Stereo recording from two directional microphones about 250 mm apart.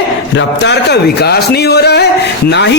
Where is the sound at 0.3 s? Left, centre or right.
Left.